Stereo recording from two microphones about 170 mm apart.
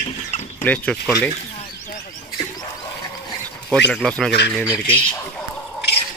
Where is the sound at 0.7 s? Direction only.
10° left (ahead or behind).